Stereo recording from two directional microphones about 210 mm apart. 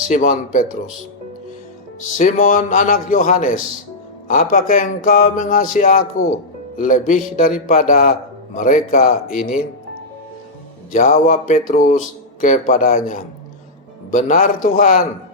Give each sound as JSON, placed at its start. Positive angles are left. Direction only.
{"t": 0.1, "sound": "speech", "side_deg": 40}
{"t": 2.1, "sound": "speech", "side_deg": 40}
{"t": 10.9, "sound": "speech", "side_deg": 40}